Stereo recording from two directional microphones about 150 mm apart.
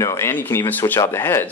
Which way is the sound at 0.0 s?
20° left (ahead or behind).